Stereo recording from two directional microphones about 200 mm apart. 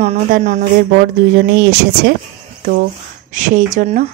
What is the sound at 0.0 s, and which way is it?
Speech, 35° right (ahead or behind).